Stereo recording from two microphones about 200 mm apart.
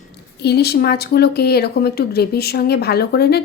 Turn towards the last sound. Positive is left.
turn(degrees=55)  # may be behind; listen again after turning